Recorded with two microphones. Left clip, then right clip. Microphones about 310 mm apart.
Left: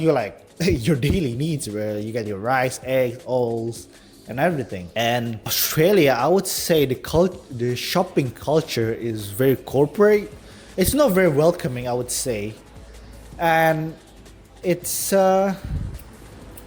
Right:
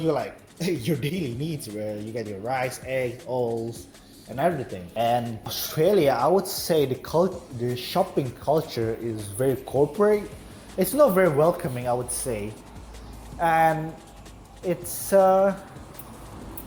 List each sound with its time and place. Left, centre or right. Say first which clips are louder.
0.0 s speech: left 6 dB; left